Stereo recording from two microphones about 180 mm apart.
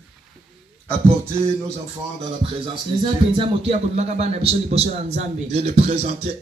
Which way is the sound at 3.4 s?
30° right (ahead or behind).